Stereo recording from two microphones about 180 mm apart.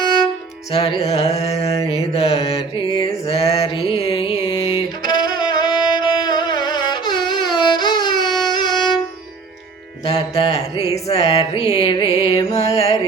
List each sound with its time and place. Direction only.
0.7 s carnatic music: 30° left (ahead or behind)
2.1 s mantra: 35° left (ahead or behind)
3.6 s music: 25° left (ahead or behind)
10.2 s mantra: 20° left (ahead or behind)
11.1 s music: 35° left (ahead or behind)